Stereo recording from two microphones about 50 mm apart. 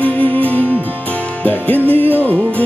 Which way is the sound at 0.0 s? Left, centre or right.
Left.